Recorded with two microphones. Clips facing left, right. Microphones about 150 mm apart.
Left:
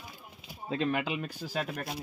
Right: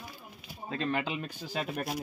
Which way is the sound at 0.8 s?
5° left (ahead or behind).